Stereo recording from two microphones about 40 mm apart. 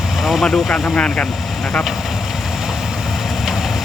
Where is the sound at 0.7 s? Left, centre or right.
Left.